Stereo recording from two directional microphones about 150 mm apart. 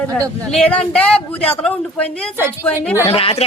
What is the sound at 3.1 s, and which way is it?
Speech, 40° left (ahead or behind).